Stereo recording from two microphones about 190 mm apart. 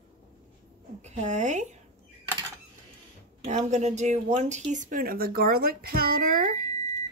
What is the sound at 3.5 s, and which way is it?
Speech, 40° right (ahead or behind).